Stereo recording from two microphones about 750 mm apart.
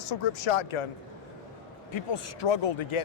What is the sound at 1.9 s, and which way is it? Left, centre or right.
Speech, left.